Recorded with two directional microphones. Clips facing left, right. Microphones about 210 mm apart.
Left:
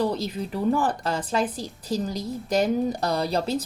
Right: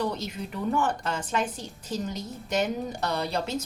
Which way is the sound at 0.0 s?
35° left (ahead or behind).